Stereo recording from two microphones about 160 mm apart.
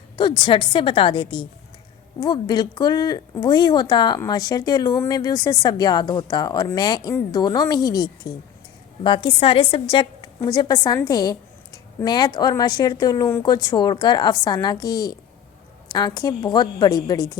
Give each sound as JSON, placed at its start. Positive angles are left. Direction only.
{"t": 0.2, "sound": "a woman's voice", "side_deg": 30}